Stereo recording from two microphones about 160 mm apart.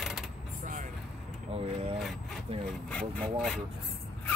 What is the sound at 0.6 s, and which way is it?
Vehicle, 55° right (ahead or behind).